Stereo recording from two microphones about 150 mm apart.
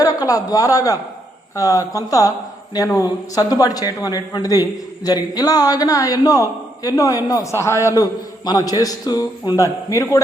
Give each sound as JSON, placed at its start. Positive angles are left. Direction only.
{"t": 0.0, "sound": "a man's voice", "side_deg": 25}